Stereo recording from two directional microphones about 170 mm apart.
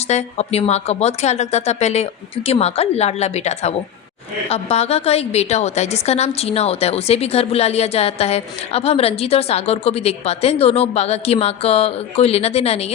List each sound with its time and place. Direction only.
0.1 s a woman's voice: 40° left (ahead or behind)